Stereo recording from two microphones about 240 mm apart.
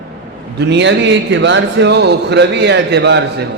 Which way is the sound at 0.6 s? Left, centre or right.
Right.